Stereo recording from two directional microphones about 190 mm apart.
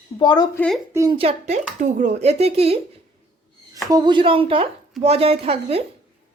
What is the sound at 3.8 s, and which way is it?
Speech, 20° right (ahead or behind).